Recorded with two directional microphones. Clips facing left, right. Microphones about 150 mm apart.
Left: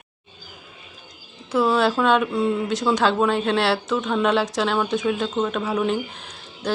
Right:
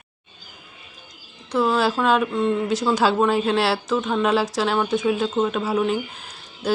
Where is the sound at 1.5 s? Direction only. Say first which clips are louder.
Left 1 dB; centre (ahead or behind).